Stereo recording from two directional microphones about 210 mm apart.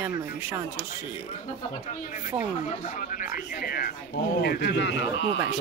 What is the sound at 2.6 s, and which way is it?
Speech, 40° left (ahead or behind).